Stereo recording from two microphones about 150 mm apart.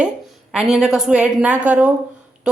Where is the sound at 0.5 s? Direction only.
5° right (ahead or behind).